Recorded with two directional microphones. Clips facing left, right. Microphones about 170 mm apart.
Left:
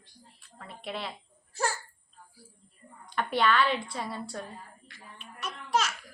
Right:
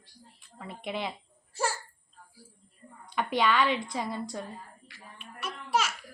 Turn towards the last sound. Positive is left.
turn(degrees=-10)  # may be behind; listen again after turning